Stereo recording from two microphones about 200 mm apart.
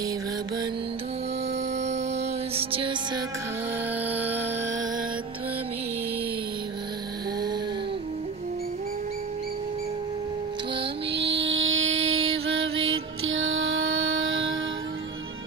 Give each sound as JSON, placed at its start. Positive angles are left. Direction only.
{"t": 1.8, "sound": "music", "side_deg": -35}
{"t": 4.1, "sound": "a sound", "side_deg": -10}
{"t": 11.3, "sound": "music", "side_deg": -70}